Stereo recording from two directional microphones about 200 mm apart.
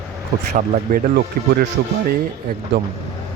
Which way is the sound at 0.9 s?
45° right (ahead or behind).